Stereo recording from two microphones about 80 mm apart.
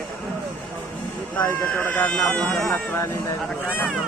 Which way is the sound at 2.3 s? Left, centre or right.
Centre.